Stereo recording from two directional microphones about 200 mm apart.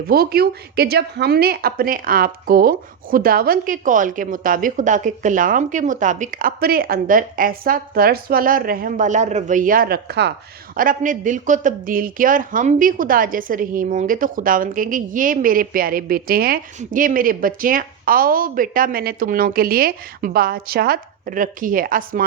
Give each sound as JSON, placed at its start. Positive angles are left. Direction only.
{"t": 0.1, "sound": "a woman's voice", "side_deg": -50}
{"t": 10.8, "sound": "a woman's voice", "side_deg": -40}